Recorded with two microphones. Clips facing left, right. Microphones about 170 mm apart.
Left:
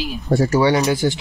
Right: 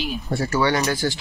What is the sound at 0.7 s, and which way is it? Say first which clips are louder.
Speech: left 5 dB; 20° left (ahead or behind).